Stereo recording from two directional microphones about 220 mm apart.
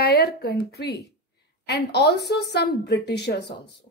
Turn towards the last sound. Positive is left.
turn(degrees=50)  # may be behind; listen again after turning